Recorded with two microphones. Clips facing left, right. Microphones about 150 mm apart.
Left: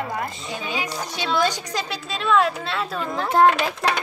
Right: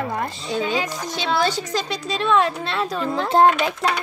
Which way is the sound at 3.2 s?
25° right (ahead or behind).